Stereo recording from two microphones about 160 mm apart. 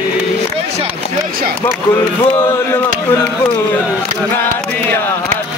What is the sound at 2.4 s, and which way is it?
Speech, 15° left (ahead or behind).